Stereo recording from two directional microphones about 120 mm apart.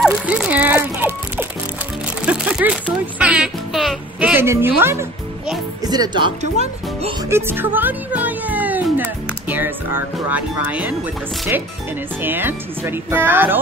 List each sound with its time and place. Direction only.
0.0 s speech: 10° right (ahead or behind)
2.2 s music: 10° right (ahead or behind)
4.2 s music: 20° right (ahead or behind)
4.7 s speech: 20° right (ahead or behind)
5.9 s speech: 40° right (ahead or behind)
6.6 s speech: 60° right (ahead or behind)
7.2 s speech: 20° right (ahead or behind)
12.2 s speech: 15° right (ahead or behind)